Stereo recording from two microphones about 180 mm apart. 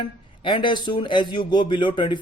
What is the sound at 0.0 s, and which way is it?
Speech, 25° left (ahead or behind).